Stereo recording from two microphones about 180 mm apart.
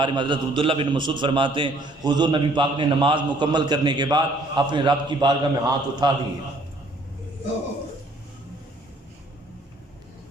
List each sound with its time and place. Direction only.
0.0 s a man's voice: 25° right (ahead or behind)